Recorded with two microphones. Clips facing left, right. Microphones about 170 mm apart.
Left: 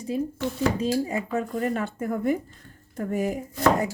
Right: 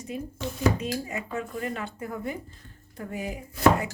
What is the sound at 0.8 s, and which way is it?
Speech, 35° left (ahead or behind).